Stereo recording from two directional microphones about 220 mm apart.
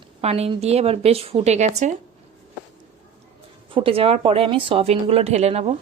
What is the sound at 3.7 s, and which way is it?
Speech, 25° right (ahead or behind).